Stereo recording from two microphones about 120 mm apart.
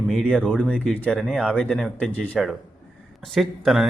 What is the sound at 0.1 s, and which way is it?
A man's voice, 5° left (ahead or behind).